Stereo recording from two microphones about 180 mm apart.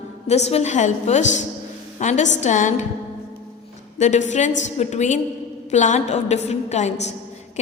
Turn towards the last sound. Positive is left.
turn(degrees=40)  # may be behind; listen again after turning